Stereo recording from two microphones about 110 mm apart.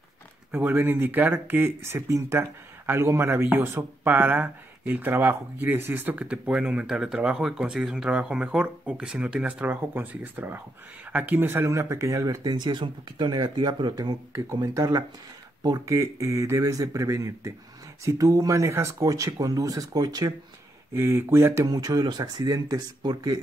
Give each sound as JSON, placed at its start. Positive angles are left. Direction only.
{"t": 0.5, "sound": "a man's voice", "side_deg": -20}
{"t": 14.3, "sound": "speech", "side_deg": -30}
{"t": 20.9, "sound": "speech", "side_deg": -20}
{"t": 21.6, "sound": "speech", "side_deg": -35}